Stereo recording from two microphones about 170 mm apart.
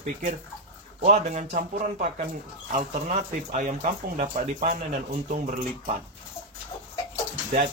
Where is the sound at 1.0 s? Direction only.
45° right (ahead or behind).